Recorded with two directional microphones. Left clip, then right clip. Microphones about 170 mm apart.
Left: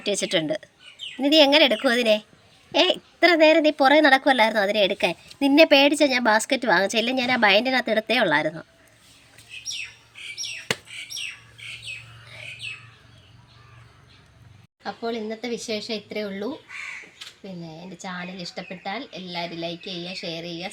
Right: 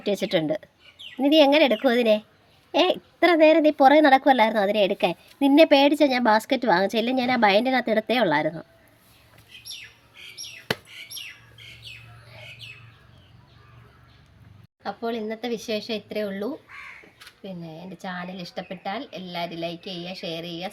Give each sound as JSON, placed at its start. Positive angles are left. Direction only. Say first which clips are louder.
{"t": 0.0, "sound": "a woman's voice", "louder": "even", "side_deg": -35}
{"t": 14.8, "sound": "speech", "louder": "even", "side_deg": -30}
{"t": 18.0, "sound": "speech", "louder": "even", "side_deg": -30}